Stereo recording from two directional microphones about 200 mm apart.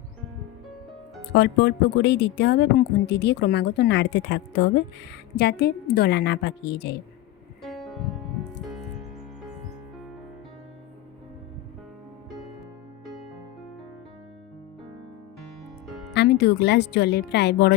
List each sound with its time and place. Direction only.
1.3 s speech: 60° left (ahead or behind)
7.6 s music: centre (ahead or behind)
15.9 s music: centre (ahead or behind)
16.1 s speech: 55° left (ahead or behind)